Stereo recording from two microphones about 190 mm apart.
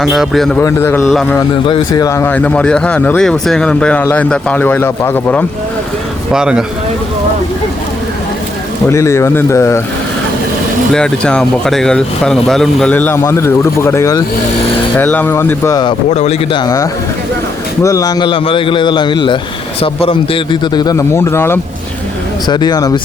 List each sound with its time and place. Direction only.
0.0 s speech: centre (ahead or behind)
0.6 s speech: 10° left (ahead or behind)
6.3 s speech: 5° right (ahead or behind)
8.9 s speech: 15° left (ahead or behind)
10.9 s speech: 5° left (ahead or behind); by 16.0 s 20° left (ahead or behind)
16.1 s a man's voice: 35° left (ahead or behind)